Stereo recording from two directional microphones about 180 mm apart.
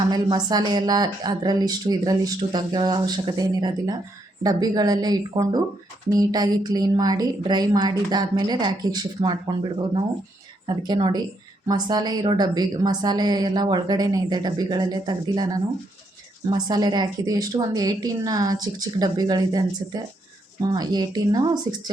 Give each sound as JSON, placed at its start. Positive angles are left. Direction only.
{"t": 0.1, "sound": "a woman's voice", "side_deg": -25}
{"t": 10.7, "sound": "a woman's voice", "side_deg": -25}